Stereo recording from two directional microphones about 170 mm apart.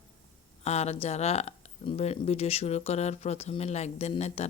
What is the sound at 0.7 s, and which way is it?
Speech, 40° left (ahead or behind).